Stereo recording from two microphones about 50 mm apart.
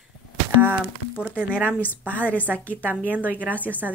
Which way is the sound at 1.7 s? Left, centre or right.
Left.